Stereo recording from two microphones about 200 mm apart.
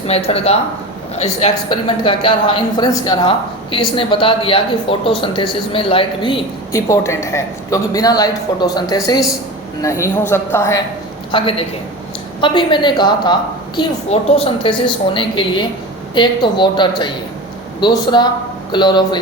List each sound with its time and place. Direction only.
0.1 s a woman's voice: 30° left (ahead or behind); by 10.8 s 15° left (ahead or behind)
11.3 s a woman's voice: 25° left (ahead or behind)